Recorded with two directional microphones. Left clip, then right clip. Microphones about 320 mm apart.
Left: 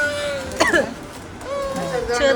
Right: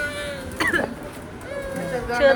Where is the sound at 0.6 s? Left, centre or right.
Centre.